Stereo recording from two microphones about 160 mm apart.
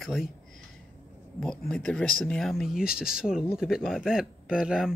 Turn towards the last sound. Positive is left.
turn(degrees=-5)  # may be behind; listen again after turning